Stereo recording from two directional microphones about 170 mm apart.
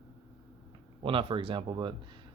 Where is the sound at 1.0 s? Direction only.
30° right (ahead or behind).